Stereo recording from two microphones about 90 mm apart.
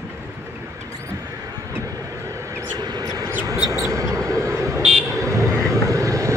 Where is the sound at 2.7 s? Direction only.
50° right (ahead or behind).